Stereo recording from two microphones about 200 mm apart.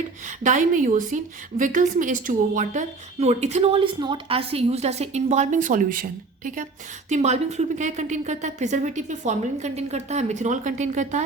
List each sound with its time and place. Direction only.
0.3 s a woman's voice: 40° right (ahead or behind)